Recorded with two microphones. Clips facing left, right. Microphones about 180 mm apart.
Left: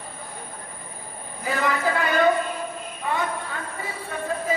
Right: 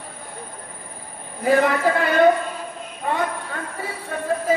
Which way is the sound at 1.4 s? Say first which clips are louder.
Right 9 dB; 50° right (ahead or behind).